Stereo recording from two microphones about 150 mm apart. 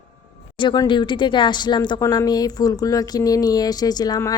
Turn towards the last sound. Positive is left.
turn(degrees=25)  # may be behind; listen again after turning